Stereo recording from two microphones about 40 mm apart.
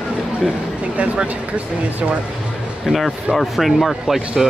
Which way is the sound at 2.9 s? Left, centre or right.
Centre.